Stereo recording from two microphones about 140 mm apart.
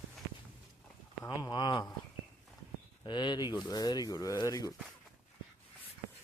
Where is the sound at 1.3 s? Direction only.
30° left (ahead or behind).